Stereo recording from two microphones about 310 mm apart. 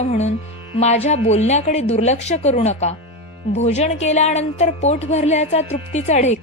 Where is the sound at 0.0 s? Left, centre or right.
Left.